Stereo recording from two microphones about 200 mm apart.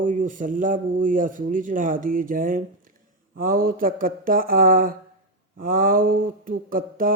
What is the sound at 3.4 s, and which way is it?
Mantra, 45° right (ahead or behind).